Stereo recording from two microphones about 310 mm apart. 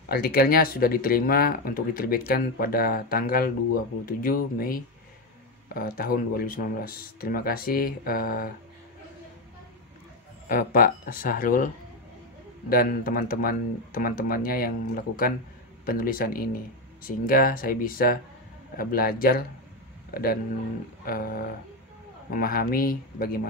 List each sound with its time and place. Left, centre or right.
0.1 s speech: left
10.5 s speech: left
21.0 s speech: left